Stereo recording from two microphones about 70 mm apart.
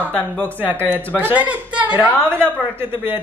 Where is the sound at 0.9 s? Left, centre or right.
Right.